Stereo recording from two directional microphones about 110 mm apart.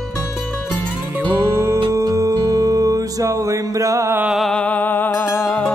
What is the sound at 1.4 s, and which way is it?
Music, 25° right (ahead or behind).